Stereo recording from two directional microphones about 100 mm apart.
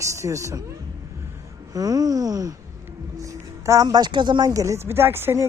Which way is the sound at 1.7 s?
40° right (ahead or behind).